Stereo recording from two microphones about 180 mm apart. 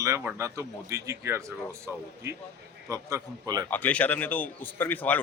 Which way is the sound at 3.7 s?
10° left (ahead or behind).